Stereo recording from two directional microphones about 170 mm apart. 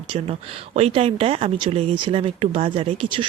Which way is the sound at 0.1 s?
35° right (ahead or behind).